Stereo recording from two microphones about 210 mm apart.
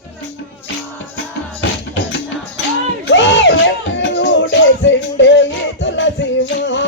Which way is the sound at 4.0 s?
55° left (ahead or behind).